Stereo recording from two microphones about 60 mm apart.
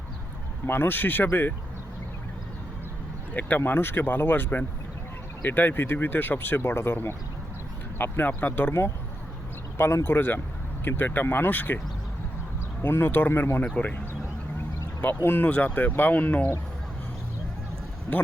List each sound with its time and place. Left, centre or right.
0.7 s speech: left
3.6 s speech: left
9.7 s speech: left
12.8 s speech: left
15.2 s speech: left
15.4 s speech: left